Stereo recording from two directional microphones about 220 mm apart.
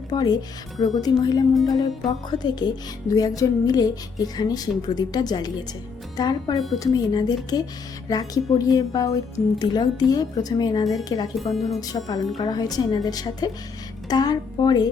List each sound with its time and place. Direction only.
0.1 s speech: 20° left (ahead or behind)
11.3 s speech: centre (ahead or behind)
11.8 s speech: 15° left (ahead or behind)